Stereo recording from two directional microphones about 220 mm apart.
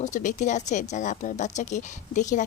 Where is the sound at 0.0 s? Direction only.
35° left (ahead or behind).